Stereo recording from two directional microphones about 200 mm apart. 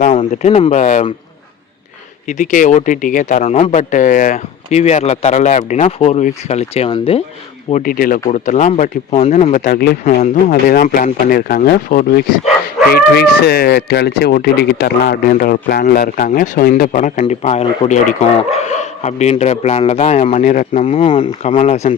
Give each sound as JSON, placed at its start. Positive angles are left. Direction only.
{"t": 0.1, "sound": "a man's voice", "side_deg": 30}
{"t": 2.2, "sound": "a man's voice", "side_deg": 40}
{"t": 7.7, "sound": "a man's voice", "side_deg": 45}
{"t": 20.8, "sound": "a man's voice", "side_deg": 30}